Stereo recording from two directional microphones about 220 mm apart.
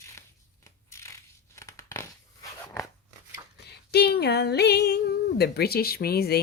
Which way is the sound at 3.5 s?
50° left (ahead or behind).